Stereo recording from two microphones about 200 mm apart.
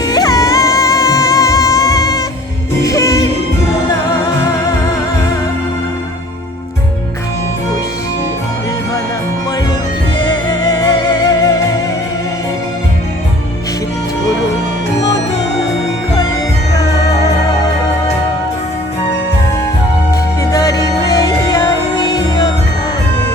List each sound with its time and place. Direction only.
0.0 s music: 20° left (ahead or behind)
10.2 s music: 20° left (ahead or behind)
20.4 s music: 15° left (ahead or behind)